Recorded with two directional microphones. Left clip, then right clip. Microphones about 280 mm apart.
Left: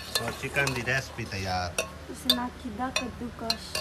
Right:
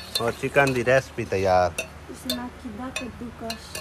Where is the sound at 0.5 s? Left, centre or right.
Centre.